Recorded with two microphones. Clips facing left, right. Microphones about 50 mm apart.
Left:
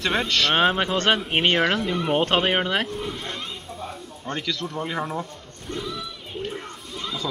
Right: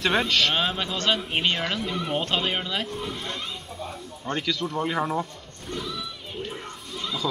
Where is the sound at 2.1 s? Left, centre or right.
Left.